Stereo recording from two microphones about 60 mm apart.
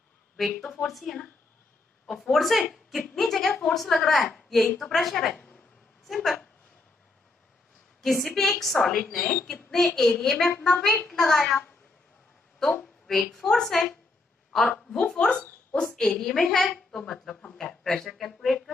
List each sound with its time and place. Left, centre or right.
0.4 s a woman's voice: centre
8.0 s a woman's voice: centre
12.8 s a woman's voice: centre